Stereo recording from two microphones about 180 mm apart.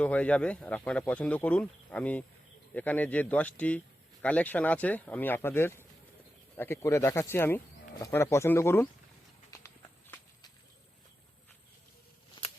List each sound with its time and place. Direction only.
0.0 s speech: 5° left (ahead or behind)
9.5 s clip-clop: 15° left (ahead or behind)